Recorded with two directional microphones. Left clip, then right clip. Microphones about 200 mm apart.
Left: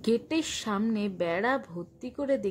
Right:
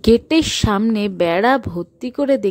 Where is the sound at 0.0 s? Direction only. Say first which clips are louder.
Right 14 dB; 45° right (ahead or behind).